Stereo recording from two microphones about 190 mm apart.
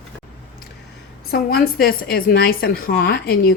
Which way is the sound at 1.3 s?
55° left (ahead or behind).